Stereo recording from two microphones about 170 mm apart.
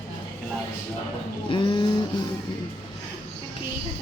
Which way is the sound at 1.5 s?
30° left (ahead or behind).